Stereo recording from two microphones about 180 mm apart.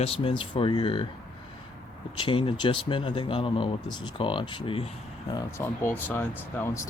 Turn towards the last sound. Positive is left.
turn(degrees=15)  # may be behind; listen again after turning